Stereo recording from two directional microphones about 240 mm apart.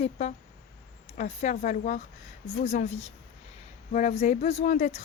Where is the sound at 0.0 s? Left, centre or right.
Left.